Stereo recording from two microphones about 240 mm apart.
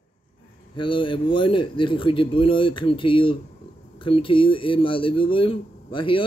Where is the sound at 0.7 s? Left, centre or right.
Centre.